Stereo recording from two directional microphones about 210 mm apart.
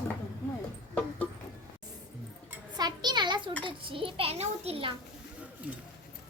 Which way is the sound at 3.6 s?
25° right (ahead or behind).